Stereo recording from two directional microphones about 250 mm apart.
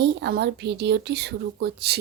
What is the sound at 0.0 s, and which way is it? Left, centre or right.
A woman's voice, right.